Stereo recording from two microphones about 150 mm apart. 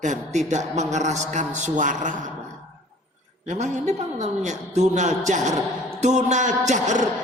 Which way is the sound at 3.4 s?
50° right (ahead or behind).